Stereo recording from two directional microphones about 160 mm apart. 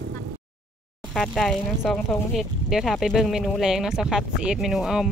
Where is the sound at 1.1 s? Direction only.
Centre (ahead or behind).